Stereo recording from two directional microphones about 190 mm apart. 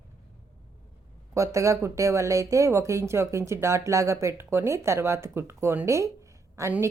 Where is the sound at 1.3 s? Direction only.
15° right (ahead or behind).